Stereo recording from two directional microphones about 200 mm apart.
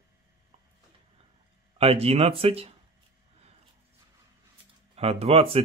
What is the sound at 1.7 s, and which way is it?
A man's voice, 30° right (ahead or behind).